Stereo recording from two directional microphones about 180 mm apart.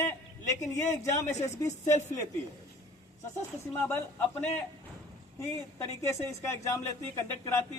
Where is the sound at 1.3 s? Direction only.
40° left (ahead or behind).